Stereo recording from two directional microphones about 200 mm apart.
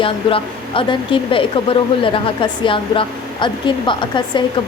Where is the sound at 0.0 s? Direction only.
25° left (ahead or behind).